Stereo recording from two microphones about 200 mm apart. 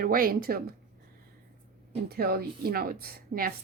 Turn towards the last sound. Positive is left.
turn(degrees=-50)  # may be behind; listen again after turning